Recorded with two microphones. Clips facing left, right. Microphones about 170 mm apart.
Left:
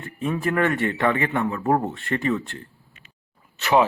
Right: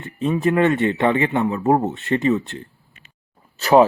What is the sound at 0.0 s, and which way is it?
Speech, 20° right (ahead or behind).